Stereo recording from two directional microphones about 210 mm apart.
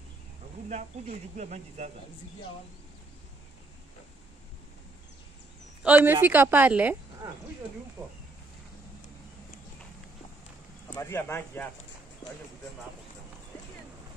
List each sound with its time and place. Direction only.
0.7 s speech: 35° right (ahead or behind)
5.8 s a woman's voice: 5° right (ahead or behind)
8.0 s a woman's voice: 15° right (ahead or behind)
10.9 s speech: 10° left (ahead or behind)